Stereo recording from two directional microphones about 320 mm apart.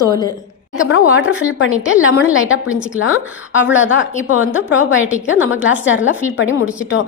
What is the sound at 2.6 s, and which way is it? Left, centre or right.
Speech, centre.